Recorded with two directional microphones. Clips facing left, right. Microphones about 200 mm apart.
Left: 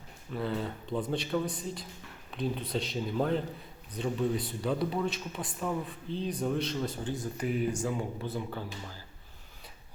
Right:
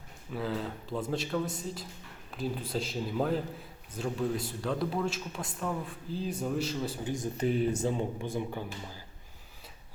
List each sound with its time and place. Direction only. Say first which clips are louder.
0.3 s a man's voice: left 1 dB; centre (ahead or behind)
7.3 s speech: right 3 dB; 30° right (ahead or behind)